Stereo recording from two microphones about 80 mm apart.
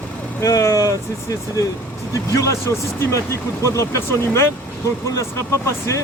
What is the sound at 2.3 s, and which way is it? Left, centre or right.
Speech, left.